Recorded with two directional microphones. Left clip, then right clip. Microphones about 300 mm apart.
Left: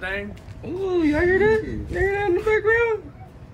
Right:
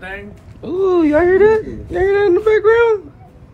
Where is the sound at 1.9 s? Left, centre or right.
Right.